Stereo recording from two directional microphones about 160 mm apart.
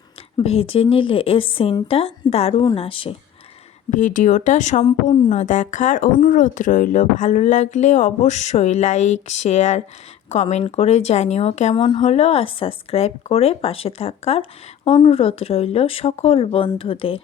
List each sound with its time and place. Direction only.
0.3 s speech: 35° left (ahead or behind)
3.9 s speech: 55° left (ahead or behind); by 12.0 s 30° left (ahead or behind)
12.0 s speech: 45° left (ahead or behind)